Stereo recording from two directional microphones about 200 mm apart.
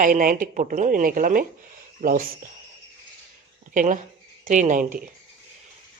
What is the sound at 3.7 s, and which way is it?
Speech, 40° right (ahead or behind).